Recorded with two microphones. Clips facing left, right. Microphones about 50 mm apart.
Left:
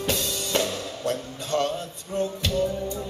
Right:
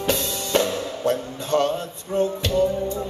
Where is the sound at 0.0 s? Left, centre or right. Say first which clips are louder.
Right 3 dB; centre.